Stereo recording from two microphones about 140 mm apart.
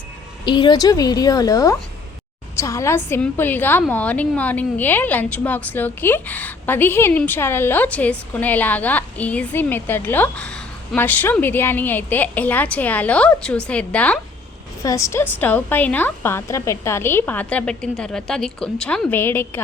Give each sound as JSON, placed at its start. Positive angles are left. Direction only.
{"t": 0.4, "sound": "a woman's voice", "side_deg": 35}
{"t": 14.8, "sound": "a woman's voice", "side_deg": 20}